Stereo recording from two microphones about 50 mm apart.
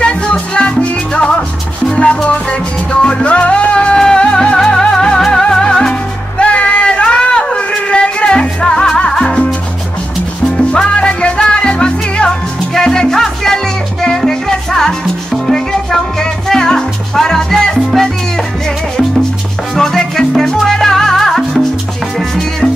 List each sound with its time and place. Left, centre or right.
0.0 s music: left
4.6 s music: centre
6.4 s a sound: left
10.7 s music: centre
19.7 s salsa music: centre